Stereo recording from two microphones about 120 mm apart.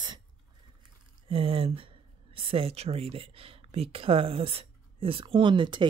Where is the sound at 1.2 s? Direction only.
50° right (ahead or behind).